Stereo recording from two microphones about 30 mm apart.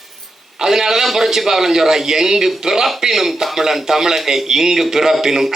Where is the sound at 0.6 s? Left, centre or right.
Centre.